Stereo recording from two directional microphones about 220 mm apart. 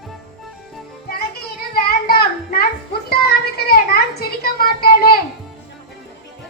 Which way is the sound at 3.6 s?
45° left (ahead or behind).